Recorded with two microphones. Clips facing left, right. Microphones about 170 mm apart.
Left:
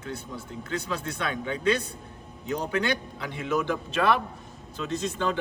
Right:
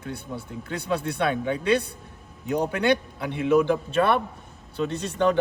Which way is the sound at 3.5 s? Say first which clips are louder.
Right 7 dB; 55° right (ahead or behind).